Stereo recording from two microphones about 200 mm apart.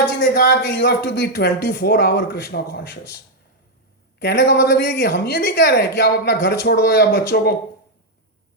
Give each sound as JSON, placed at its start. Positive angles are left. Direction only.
{"t": 0.2, "sound": "speech", "side_deg": 50}
{"t": 4.2, "sound": "speech", "side_deg": 55}